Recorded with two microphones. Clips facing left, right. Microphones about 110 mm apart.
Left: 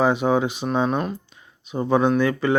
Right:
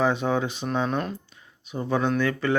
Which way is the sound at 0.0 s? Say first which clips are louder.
Left 4 dB; 15° left (ahead or behind).